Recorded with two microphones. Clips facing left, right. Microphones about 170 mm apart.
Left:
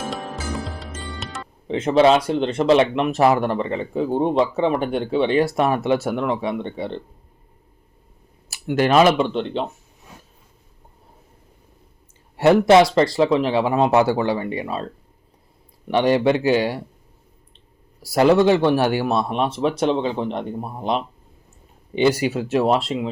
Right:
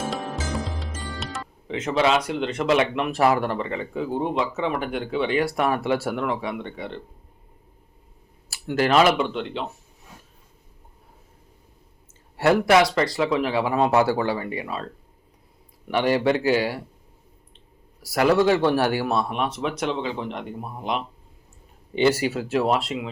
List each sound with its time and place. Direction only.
0.1 s music: centre (ahead or behind)
1.6 s speech: 30° left (ahead or behind)
8.4 s speech: 20° left (ahead or behind)
12.4 s speech: 25° left (ahead or behind)
15.9 s speech: 20° left (ahead or behind)
18.0 s speech: 25° left (ahead or behind)
21.9 s speech: 15° left (ahead or behind)